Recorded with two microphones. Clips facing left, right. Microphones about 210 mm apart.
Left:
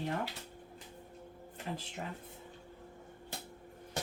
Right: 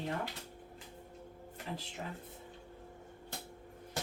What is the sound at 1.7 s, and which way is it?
Speech, 55° left (ahead or behind).